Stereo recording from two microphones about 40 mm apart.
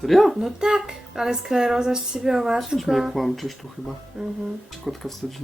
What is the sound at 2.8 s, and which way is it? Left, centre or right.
Speech, centre.